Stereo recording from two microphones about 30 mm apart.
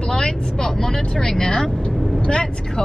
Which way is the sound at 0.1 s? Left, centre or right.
Left.